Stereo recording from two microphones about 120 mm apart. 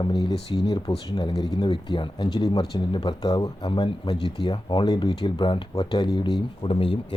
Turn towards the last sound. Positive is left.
turn(degrees=50)  # may be behind; listen again after turning